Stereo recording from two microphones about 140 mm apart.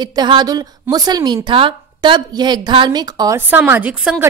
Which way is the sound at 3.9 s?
5° right (ahead or behind).